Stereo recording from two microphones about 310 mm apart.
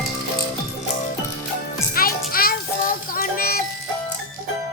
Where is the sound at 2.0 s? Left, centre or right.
Left.